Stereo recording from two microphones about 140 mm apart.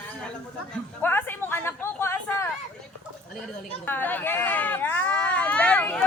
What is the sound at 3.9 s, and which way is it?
Speech, 15° left (ahead or behind).